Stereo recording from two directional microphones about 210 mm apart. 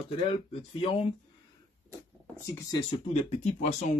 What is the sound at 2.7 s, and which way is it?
Speech, 30° left (ahead or behind).